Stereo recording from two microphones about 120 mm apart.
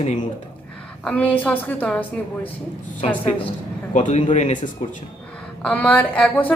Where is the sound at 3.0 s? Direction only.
65° left (ahead or behind).